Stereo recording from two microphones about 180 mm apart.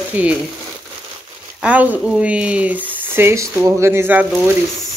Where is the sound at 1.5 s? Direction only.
5° right (ahead or behind).